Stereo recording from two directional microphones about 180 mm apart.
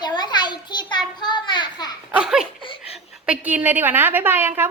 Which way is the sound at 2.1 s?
5° right (ahead or behind).